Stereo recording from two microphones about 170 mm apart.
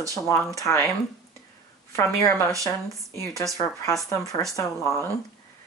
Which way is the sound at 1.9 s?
15° left (ahead or behind).